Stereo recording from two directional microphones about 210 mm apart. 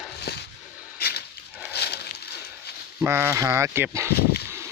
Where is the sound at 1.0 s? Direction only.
50° left (ahead or behind).